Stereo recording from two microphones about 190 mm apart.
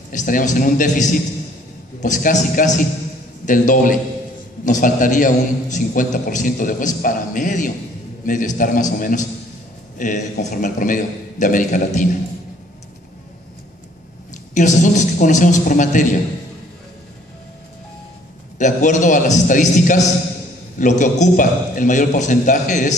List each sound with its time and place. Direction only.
0.1 s a man's voice: 45° left (ahead or behind)
14.5 s a man's voice: 40° left (ahead or behind)
18.6 s a man's voice: 40° left (ahead or behind)